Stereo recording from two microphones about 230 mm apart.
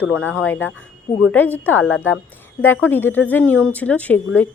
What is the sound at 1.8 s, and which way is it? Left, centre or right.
Speech, left.